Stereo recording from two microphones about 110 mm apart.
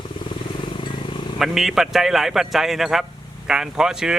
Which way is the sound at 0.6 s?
45° left (ahead or behind).